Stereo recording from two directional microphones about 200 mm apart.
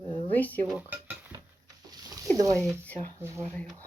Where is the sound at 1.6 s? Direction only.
15° right (ahead or behind).